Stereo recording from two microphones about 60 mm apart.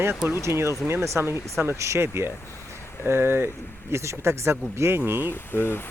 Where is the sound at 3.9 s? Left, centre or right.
Right.